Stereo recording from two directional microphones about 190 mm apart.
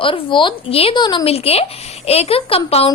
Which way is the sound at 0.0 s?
25° left (ahead or behind).